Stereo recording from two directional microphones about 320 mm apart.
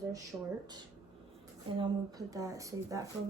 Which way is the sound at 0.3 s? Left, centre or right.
Centre.